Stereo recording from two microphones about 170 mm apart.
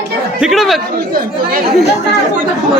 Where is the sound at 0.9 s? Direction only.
60° right (ahead or behind).